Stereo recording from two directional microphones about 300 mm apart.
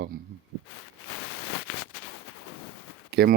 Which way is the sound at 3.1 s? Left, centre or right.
Right.